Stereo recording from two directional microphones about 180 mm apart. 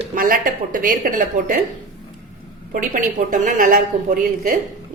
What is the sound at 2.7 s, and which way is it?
A woman's voice, 45° right (ahead or behind).